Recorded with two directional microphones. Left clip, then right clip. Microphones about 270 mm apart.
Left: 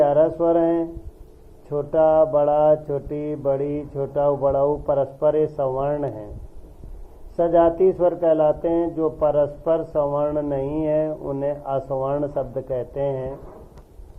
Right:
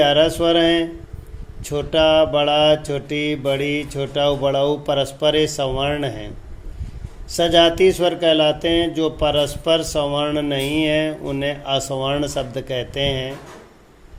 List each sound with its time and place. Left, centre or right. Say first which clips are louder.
0.0 s speech: right 2 dB; right
7.3 s speech: right 3 dB; right